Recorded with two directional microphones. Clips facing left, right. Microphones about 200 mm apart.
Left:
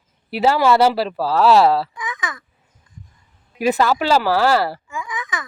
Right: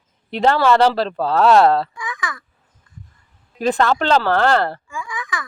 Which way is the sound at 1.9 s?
20° left (ahead or behind).